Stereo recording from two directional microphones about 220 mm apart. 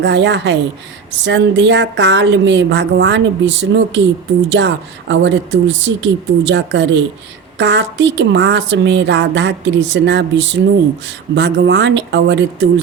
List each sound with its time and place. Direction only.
0.0 s a woman's voice: 55° right (ahead or behind)